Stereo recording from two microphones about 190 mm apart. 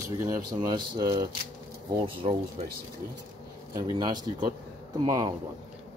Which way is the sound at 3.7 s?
20° right (ahead or behind).